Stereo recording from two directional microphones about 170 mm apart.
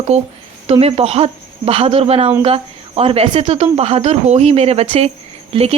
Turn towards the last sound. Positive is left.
turn(degrees=-35)  # may be behind; listen again after turning